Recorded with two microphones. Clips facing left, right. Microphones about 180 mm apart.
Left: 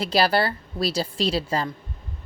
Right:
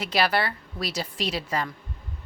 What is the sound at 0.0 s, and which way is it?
A woman's voice, 35° left (ahead or behind).